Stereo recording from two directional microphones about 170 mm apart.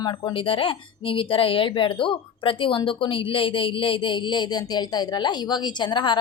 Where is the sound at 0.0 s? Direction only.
25° left (ahead or behind).